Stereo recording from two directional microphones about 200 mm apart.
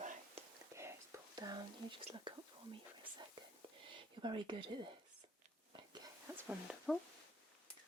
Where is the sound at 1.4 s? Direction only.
20° right (ahead or behind).